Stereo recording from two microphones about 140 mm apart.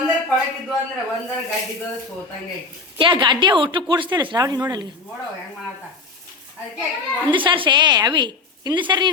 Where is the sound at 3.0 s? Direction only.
35° right (ahead or behind).